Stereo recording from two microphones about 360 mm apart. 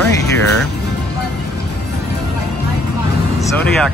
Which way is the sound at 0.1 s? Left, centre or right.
Centre.